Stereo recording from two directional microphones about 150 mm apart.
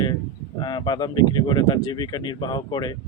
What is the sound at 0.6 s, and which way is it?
Speech, 30° left (ahead or behind).